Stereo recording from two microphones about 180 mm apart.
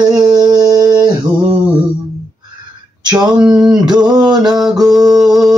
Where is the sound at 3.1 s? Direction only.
5° right (ahead or behind).